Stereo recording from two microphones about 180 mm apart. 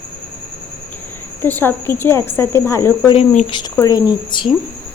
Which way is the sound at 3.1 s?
40° left (ahead or behind).